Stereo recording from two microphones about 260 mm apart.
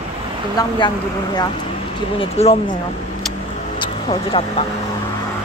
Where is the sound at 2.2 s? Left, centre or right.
Left.